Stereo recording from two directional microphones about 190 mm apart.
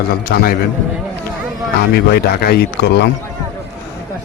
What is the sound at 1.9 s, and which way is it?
A man's voice, 55° left (ahead or behind).